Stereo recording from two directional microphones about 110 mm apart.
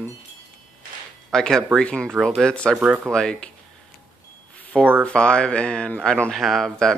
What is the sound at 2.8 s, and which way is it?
Speech, 10° right (ahead or behind).